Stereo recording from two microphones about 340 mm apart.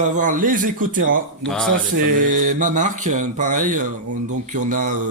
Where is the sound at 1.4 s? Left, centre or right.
Centre.